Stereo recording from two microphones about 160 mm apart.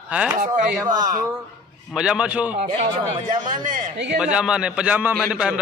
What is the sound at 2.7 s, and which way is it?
Speech, 30° right (ahead or behind).